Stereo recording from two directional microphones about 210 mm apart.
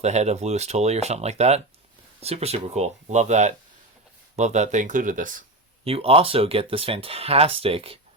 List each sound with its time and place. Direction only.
0.0 s speech: 30° right (ahead or behind)
5.8 s speech: 25° right (ahead or behind)